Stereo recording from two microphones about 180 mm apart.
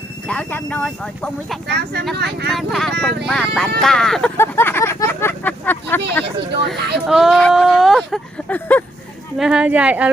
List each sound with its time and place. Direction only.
0.3 s speech: 10° left (ahead or behind)
1.6 s speech: 65° right (ahead or behind)
2.5 s speech: centre (ahead or behind)
4.4 s a sound: 15° left (ahead or behind)
6.7 s speech: centre (ahead or behind)
9.4 s speech: 5° right (ahead or behind)